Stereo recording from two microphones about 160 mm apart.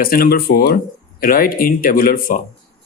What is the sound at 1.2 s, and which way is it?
Speech, 65° left (ahead or behind).